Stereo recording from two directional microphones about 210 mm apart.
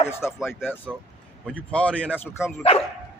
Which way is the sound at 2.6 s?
30° left (ahead or behind).